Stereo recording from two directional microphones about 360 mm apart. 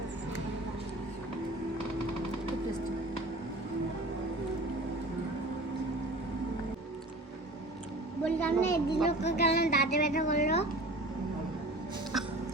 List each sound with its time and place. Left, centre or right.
8.2 s a child's voice: centre
9.2 s a child's voice: left
12.1 s hiccup: centre